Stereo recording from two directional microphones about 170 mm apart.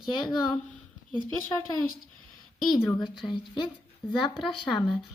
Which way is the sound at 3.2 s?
25° left (ahead or behind).